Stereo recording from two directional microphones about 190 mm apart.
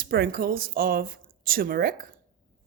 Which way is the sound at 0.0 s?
50° right (ahead or behind).